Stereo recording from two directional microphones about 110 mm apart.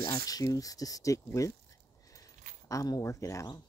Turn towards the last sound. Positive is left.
turn(degrees=25)  # may be behind; listen again after turning